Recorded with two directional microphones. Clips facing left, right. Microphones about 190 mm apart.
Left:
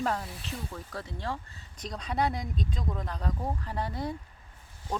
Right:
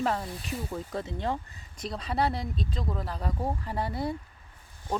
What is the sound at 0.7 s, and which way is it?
Speech, 20° right (ahead or behind).